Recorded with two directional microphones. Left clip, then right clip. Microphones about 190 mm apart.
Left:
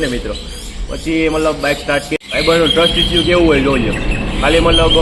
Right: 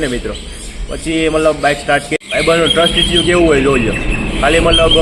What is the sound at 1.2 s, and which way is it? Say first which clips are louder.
A man's voice: right 3 dB; 15° right (ahead or behind).